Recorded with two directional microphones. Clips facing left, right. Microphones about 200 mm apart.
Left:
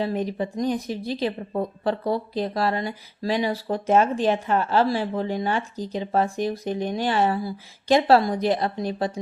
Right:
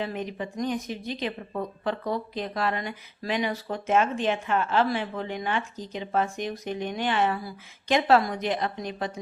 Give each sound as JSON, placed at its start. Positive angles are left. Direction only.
{"t": 0.0, "sound": "speech", "side_deg": 35}